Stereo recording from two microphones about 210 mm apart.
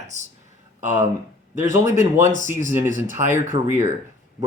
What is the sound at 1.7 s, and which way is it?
Speech, 35° right (ahead or behind).